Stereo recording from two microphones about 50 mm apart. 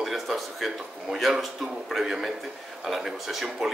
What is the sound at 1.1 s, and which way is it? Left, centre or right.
Speech, centre.